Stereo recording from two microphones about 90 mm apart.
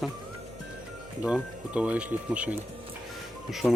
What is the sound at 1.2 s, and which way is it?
Speech, 10° right (ahead or behind).